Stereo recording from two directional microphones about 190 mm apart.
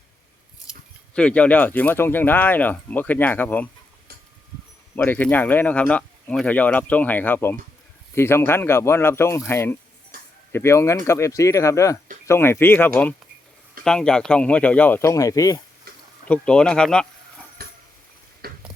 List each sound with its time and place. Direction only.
1.1 s speech: 5° left (ahead or behind)
4.9 s speech: 10° left (ahead or behind)
10.1 s a sound: 50° right (ahead or behind)
10.5 s speech: 15° left (ahead or behind)
16.2 s speech: 5° left (ahead or behind)
17.6 s a sound: 55° right (ahead or behind)